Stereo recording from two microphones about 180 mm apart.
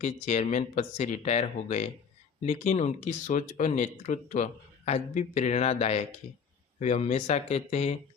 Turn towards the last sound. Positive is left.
turn(degrees=40)  # may be behind; listen again after turning